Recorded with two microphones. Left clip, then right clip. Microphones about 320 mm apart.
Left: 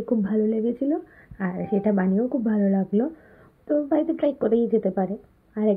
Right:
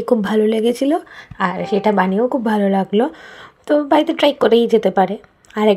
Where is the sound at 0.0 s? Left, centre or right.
Centre.